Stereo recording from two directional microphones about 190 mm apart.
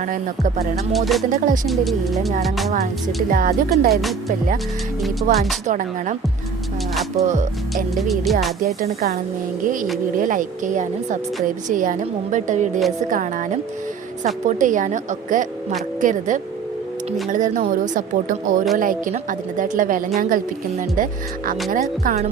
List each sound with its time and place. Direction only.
0.0 s speech: 45° right (ahead or behind)
0.9 s speech: centre (ahead or behind)
3.2 s speech: 50° right (ahead or behind)
5.3 s speech: 45° right (ahead or behind)
7.2 s a woman's voice: 40° right (ahead or behind)
7.9 s speech: centre (ahead or behind)
8.6 s speech: 55° right (ahead or behind)
10.2 s a woman's voice: 45° right (ahead or behind)